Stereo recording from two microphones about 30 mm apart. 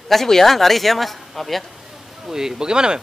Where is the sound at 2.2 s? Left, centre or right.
Centre.